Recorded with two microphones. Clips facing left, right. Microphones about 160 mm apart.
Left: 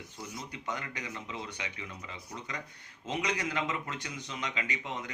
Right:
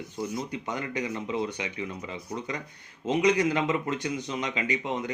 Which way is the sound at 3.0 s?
15° right (ahead or behind).